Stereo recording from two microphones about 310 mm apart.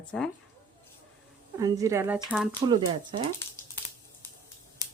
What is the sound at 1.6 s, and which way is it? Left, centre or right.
Speech, centre.